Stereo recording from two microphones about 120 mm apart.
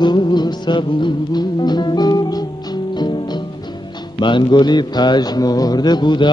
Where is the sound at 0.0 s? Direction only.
40° left (ahead or behind).